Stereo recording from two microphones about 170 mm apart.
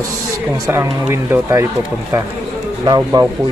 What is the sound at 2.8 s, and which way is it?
Speech, 25° right (ahead or behind).